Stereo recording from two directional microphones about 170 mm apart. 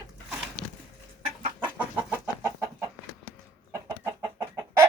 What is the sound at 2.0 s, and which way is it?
Chicken, 10° right (ahead or behind).